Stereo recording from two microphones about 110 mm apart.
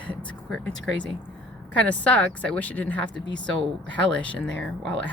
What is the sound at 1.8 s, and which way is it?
Speech, 10° left (ahead or behind).